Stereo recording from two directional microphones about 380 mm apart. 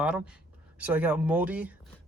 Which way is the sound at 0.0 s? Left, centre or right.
Centre.